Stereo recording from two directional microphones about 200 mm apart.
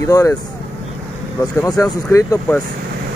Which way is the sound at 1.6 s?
15° left (ahead or behind).